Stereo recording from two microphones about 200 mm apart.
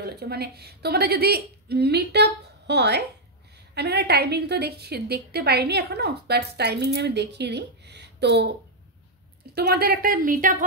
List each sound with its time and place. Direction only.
0.0 s a woman's voice: 55° right (ahead or behind)
9.6 s speech: 50° right (ahead or behind)